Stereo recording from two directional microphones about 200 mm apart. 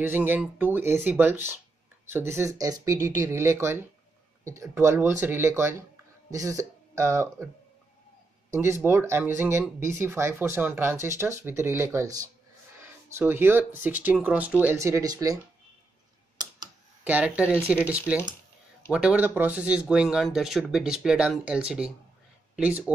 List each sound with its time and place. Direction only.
0.0 s speech: 10° right (ahead or behind)
8.5 s speech: 15° right (ahead or behind)
16.4 s computer keyboard: 20° right (ahead or behind)
17.0 s speech: 5° right (ahead or behind)